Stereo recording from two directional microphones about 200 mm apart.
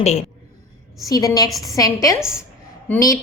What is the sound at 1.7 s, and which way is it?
A woman's voice, 15° left (ahead or behind).